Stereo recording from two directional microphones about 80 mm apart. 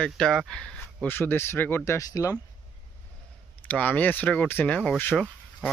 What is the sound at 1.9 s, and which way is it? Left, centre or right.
Speech, left.